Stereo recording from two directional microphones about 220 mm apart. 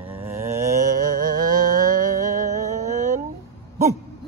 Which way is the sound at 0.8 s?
40° right (ahead or behind).